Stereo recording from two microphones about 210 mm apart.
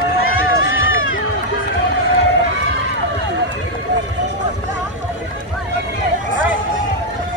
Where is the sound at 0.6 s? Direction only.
70° left (ahead or behind).